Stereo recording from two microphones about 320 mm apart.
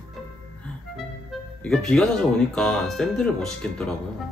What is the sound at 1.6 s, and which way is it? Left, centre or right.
Speech, centre.